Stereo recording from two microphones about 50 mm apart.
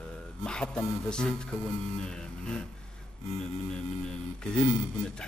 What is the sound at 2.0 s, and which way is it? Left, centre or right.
Music, centre.